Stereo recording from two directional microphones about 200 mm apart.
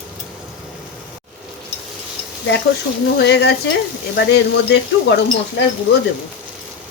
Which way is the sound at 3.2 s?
55° left (ahead or behind).